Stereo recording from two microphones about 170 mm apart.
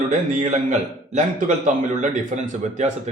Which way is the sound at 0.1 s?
45° right (ahead or behind).